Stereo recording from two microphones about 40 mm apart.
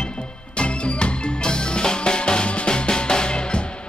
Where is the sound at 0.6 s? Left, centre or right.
Left.